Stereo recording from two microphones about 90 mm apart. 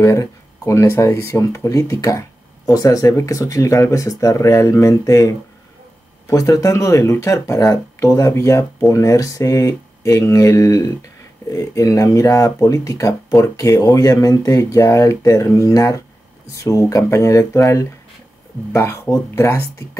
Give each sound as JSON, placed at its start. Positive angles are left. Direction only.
{"t": 0.0, "sound": "speech", "side_deg": 35}